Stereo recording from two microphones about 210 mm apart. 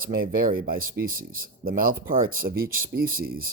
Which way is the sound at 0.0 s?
45° right (ahead or behind).